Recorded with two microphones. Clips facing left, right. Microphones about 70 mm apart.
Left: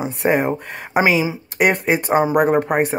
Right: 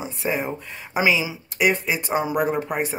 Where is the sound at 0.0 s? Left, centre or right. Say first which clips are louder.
Left 8 dB; left.